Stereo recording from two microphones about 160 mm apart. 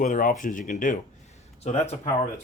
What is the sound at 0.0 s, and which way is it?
Speech, 55° left (ahead or behind).